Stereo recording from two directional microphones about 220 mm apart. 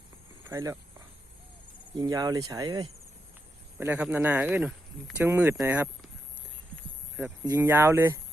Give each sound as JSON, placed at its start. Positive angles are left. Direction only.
{"t": 0.4, "sound": "speech", "side_deg": -10}
{"t": 2.0, "sound": "speech", "side_deg": -15}
{"t": 3.8, "sound": "speech", "side_deg": -5}
{"t": 7.4, "sound": "speech", "side_deg": -10}